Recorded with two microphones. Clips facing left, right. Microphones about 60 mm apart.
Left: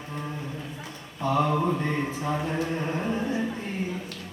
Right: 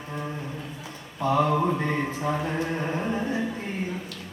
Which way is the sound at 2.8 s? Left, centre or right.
Centre.